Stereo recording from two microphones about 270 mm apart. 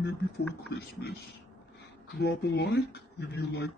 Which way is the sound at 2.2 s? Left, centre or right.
Left.